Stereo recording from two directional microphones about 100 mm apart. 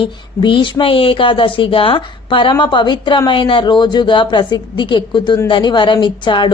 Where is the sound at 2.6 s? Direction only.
50° left (ahead or behind).